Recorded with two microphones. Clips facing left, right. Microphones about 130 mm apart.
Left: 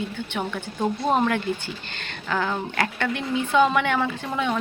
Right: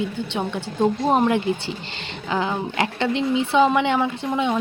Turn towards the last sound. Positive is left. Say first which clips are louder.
# right 3 dB
turn(degrees=-20)  # may be behind; listen again after turning